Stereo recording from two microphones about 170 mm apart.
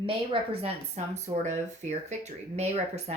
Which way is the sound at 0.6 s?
40° right (ahead or behind).